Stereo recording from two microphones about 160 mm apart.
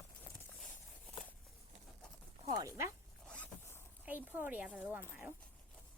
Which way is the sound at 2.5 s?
20° right (ahead or behind).